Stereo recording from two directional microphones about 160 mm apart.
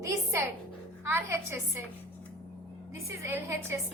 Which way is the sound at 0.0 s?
20° right (ahead or behind).